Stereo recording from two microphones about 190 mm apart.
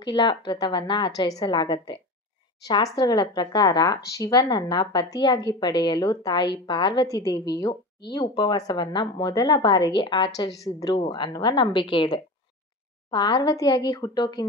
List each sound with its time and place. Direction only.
0.0 s speech: 25° left (ahead or behind)